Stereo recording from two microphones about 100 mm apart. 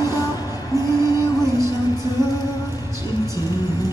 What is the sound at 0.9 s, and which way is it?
Music, 35° left (ahead or behind).